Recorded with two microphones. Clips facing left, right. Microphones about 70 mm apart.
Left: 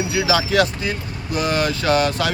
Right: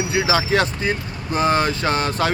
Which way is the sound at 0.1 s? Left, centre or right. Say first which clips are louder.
Right 1 dB; right.